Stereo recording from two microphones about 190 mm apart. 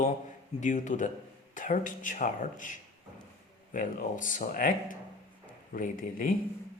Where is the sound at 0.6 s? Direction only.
40° left (ahead or behind).